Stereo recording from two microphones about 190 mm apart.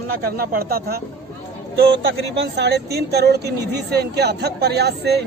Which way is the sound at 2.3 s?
65° right (ahead or behind).